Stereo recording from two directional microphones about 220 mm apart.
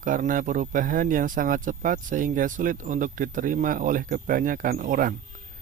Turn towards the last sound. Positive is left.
turn(degrees=-40)  # may be behind; listen again after turning